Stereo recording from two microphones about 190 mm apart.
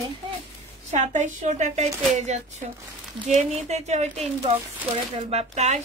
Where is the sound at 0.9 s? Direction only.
40° right (ahead or behind).